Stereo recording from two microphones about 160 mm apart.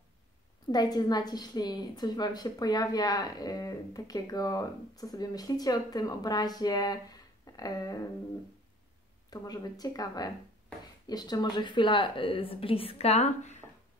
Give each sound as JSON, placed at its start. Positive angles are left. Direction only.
{"t": 0.7, "sound": "a woman's voice", "side_deg": 25}
{"t": 9.3, "sound": "a woman's voice", "side_deg": 25}